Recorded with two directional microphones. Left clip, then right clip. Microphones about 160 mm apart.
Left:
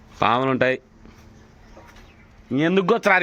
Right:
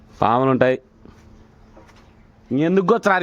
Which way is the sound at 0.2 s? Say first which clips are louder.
Right 3 dB; 35° right (ahead or behind).